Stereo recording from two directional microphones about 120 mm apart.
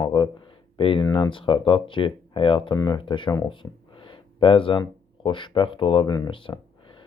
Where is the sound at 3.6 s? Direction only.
30° left (ahead or behind).